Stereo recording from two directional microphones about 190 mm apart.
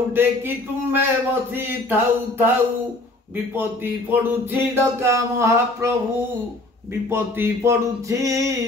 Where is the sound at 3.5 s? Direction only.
10° right (ahead or behind).